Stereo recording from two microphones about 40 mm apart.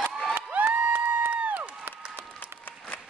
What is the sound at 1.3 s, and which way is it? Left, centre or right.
Crowd, right.